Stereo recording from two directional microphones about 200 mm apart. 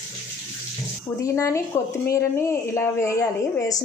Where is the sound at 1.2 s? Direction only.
15° left (ahead or behind).